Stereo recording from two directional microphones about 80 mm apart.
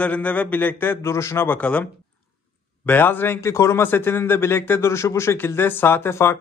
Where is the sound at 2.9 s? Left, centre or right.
Left.